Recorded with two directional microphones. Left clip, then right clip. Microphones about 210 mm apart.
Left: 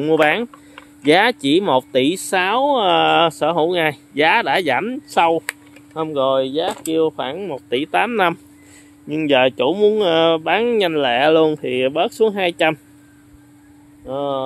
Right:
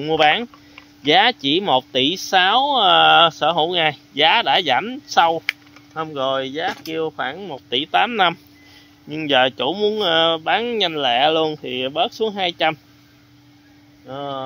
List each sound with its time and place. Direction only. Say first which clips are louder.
0.0 s speech: left 1 dB; 20° left (ahead or behind)
14.0 s speech: left 6 dB; 25° left (ahead or behind)